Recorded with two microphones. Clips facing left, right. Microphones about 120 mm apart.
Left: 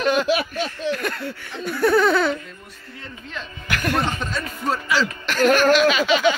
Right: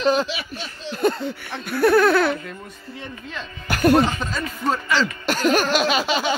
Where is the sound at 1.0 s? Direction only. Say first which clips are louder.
Right 6 dB; 25° right (ahead or behind).